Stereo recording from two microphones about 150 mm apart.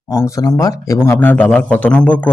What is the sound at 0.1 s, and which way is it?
Speech, 20° left (ahead or behind).